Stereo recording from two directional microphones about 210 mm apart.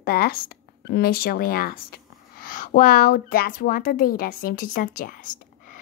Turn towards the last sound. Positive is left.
turn(degrees=40)  # may be behind; listen again after turning